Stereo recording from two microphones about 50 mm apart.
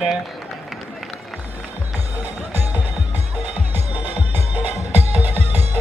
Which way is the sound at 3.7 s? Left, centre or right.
Right.